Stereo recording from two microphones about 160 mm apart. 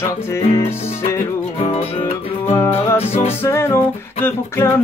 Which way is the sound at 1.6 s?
40° left (ahead or behind).